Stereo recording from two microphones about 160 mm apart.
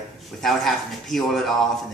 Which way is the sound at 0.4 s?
Centre (ahead or behind).